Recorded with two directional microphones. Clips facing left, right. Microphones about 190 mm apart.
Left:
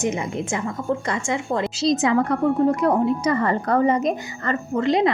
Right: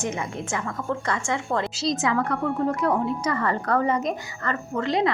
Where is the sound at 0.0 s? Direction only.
15° left (ahead or behind).